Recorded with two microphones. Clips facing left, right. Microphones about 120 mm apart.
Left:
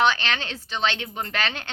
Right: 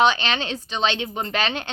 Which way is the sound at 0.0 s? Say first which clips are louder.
Right 3 dB; 20° right (ahead or behind).